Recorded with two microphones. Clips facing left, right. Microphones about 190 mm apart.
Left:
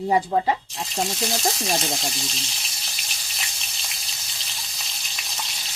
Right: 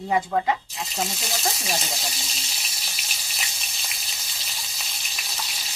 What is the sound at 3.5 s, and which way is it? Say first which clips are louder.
Frying: even; centre (ahead or behind).